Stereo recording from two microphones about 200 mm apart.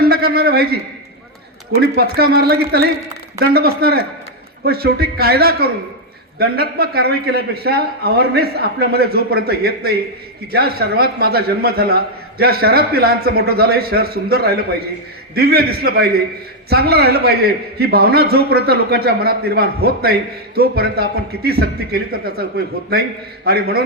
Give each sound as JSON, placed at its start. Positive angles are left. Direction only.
{"t": 0.0, "sound": "a man's voice", "side_deg": -50}